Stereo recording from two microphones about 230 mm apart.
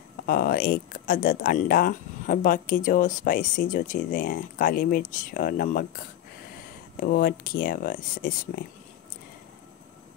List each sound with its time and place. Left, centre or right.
0.3 s speech: left